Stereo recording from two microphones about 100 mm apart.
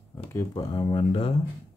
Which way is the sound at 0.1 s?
25° left (ahead or behind).